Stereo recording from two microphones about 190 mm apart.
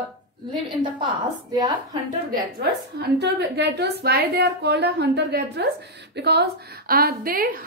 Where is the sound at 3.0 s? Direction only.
60° right (ahead or behind).